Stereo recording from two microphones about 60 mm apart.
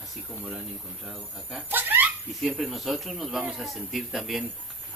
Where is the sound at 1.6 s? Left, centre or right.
Right.